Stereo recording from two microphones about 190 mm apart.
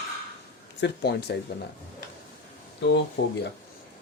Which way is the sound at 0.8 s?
60° left (ahead or behind).